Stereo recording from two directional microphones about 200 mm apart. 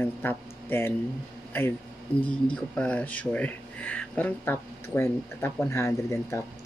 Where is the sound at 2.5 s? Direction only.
5° left (ahead or behind).